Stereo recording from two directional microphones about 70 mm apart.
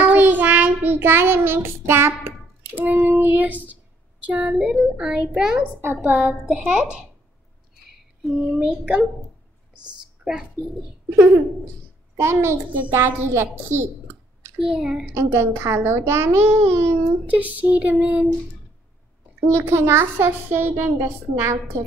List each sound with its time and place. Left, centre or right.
0.0 s child singing: right
2.7 s speech: right
4.6 s a child's voice: centre
8.2 s speech: centre
8.5 s speech: centre
10.2 s pigeon: centre
12.2 s a woman's voice: right
14.6 s a child's voice: centre
15.1 s a woman's voice: right
17.3 s speech: right
19.5 s a woman's voice: right